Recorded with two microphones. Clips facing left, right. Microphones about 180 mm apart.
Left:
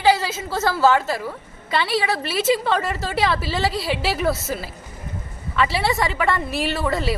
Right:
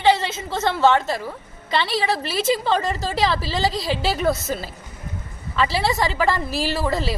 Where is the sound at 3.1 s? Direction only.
Centre (ahead or behind).